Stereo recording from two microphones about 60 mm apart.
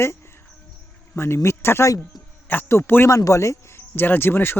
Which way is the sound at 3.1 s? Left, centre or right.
Left.